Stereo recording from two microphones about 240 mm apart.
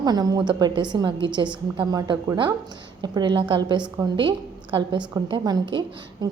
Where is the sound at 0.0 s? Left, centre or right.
Centre.